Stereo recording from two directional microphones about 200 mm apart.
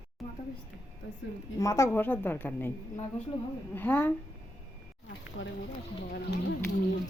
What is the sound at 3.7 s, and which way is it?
Speech, 10° left (ahead or behind).